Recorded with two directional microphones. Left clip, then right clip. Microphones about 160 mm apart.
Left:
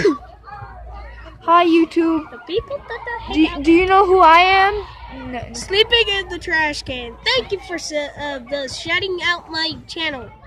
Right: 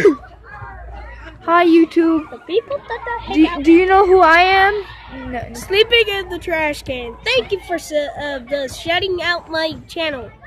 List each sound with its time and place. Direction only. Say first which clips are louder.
1.4 s speech: right 1 dB; 15° right (ahead or behind)
2.4 s speech: right 4 dB; 30° left (ahead or behind)
3.3 s speech: right 3 dB; 10° right (ahead or behind)
5.5 s speech: right 2 dB; 20° left (ahead or behind)